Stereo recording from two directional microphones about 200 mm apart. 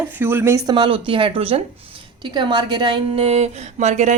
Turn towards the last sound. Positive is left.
turn(degrees=-35)  # may be behind; listen again after turning